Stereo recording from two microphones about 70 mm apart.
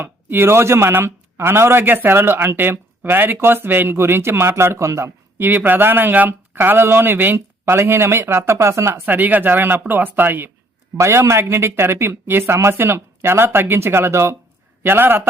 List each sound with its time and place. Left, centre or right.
0.0 s speech: right
5.4 s speech: right
9.0 s speech: right
10.9 s speech: right
14.8 s speech: right